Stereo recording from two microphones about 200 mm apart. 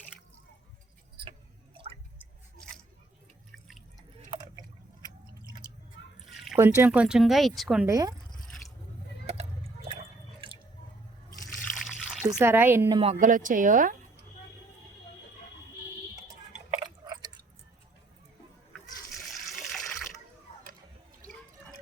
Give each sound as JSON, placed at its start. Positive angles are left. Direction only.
{"t": 1.7, "sound": "drip", "side_deg": -25}
{"t": 3.5, "sound": "drip", "side_deg": 0}
{"t": 4.3, "sound": "a sound", "side_deg": -20}
{"t": 6.6, "sound": "speech", "side_deg": -10}
{"t": 7.9, "sound": "a woman's voice", "side_deg": -15}
{"t": 9.2, "sound": "water", "side_deg": -30}
{"t": 11.5, "sound": "trickle", "side_deg": 0}
{"t": 12.2, "sound": "a woman's voice", "side_deg": -10}
{"t": 13.1, "sound": "speech", "side_deg": -40}
{"t": 17.1, "sound": "chewing", "side_deg": -20}
{"t": 19.3, "sound": "water", "side_deg": 0}